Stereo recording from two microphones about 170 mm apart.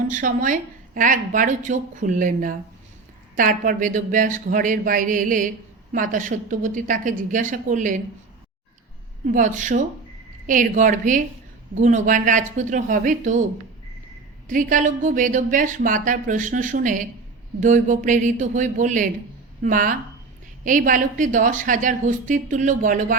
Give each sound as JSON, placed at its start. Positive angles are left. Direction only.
{"t": 0.1, "sound": "a woman's voice", "side_deg": -50}
{"t": 9.2, "sound": "a woman's voice", "side_deg": -45}